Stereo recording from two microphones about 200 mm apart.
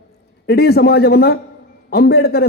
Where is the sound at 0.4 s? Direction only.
50° left (ahead or behind).